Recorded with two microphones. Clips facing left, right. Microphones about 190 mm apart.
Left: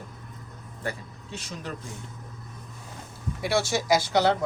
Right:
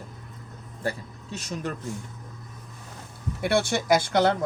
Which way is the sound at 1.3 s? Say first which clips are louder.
Right 4 dB; 50° right (ahead or behind).